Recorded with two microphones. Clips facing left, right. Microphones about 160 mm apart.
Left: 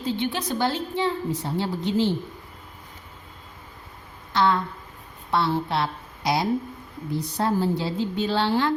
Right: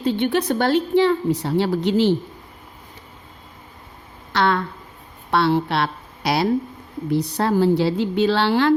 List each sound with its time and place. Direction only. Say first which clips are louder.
0.0 s a woman's voice: right 7 dB; 60° right (ahead or behind); by 2.1 s 75° right (ahead or behind)
4.3 s a woman's voice: right 2 dB; 70° right (ahead or behind)